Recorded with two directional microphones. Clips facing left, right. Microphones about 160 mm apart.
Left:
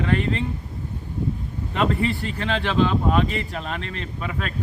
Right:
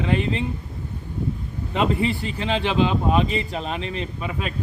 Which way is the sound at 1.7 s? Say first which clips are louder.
Right 1 dB; 15° right (ahead or behind).